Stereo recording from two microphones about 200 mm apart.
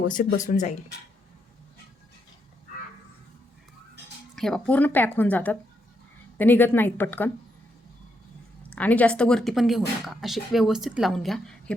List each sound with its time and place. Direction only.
0.1 s speech: 40° left (ahead or behind)
4.4 s speech: centre (ahead or behind)
8.7 s speech: 10° left (ahead or behind)